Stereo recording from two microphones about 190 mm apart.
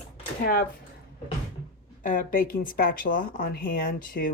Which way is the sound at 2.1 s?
45° left (ahead or behind).